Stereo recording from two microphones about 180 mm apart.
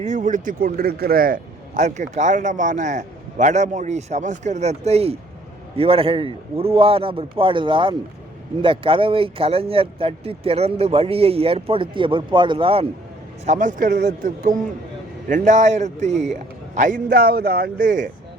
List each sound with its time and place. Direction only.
0.0 s a man's voice: 45° right (ahead or behind)
13.4 s a man's voice: 40° right (ahead or behind)
17.1 s speech: 60° right (ahead or behind)